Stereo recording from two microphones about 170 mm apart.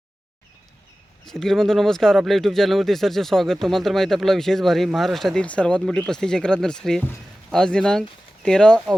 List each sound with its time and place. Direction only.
1.2 s speech: centre (ahead or behind)